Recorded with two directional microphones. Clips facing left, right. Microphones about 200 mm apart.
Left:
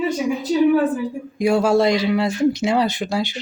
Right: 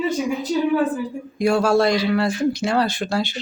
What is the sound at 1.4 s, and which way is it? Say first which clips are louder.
Speech: left 1 dB; 15° left (ahead or behind).